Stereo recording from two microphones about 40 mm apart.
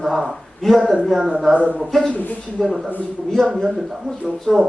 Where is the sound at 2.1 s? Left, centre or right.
Left.